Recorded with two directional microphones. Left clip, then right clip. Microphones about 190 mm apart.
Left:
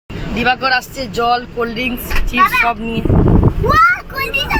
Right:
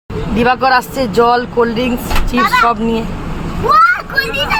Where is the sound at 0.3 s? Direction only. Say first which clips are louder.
Right 3 dB; 20° right (ahead or behind).